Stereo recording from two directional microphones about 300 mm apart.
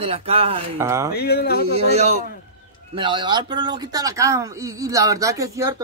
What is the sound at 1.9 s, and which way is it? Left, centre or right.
A man's voice, right.